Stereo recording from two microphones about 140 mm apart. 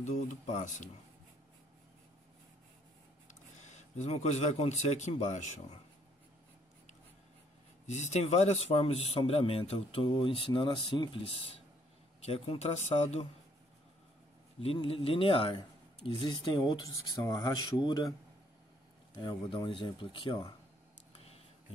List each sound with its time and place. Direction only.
0.0 s speech: 60° left (ahead or behind)
4.0 s speech: 50° left (ahead or behind)
7.8 s speech: 55° left (ahead or behind)
14.6 s speech: 45° left (ahead or behind)
19.1 s speech: 35° left (ahead or behind)
21.1 s a sound: 45° left (ahead or behind)